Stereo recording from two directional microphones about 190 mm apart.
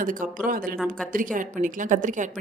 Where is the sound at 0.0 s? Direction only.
45° right (ahead or behind).